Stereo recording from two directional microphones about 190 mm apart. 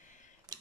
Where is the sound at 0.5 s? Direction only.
20° right (ahead or behind).